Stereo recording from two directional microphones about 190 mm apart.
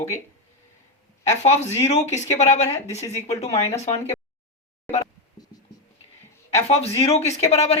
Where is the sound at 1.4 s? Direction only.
35° left (ahead or behind).